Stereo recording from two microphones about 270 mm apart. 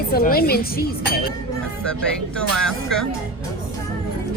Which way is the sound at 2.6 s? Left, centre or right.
Centre.